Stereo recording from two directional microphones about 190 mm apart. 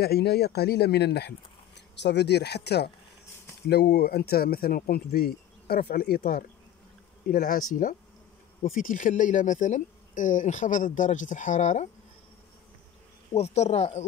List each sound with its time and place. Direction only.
0.0 s speech: 55° left (ahead or behind)
8.6 s speech: 45° left (ahead or behind)
13.3 s speech: 35° left (ahead or behind)